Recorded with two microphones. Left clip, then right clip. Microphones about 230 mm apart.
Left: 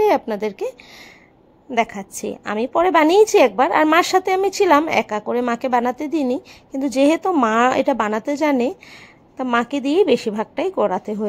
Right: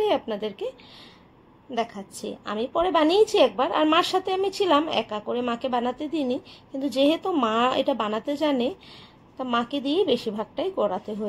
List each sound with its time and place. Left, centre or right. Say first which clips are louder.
0.0 s speech: left 7 dB; left
1.7 s a woman's voice: left 8 dB; left